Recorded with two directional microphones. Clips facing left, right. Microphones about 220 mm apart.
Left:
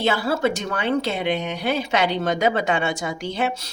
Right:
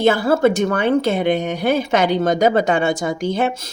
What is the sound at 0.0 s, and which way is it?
A woman's voice, 50° right (ahead or behind).